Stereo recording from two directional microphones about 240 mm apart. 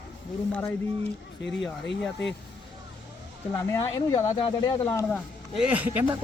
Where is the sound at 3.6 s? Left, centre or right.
Centre.